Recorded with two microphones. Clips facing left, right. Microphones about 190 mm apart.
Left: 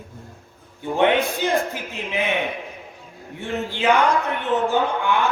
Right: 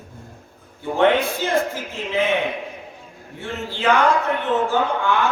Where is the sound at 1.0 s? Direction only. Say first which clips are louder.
Right 1 dB; 15° left (ahead or behind).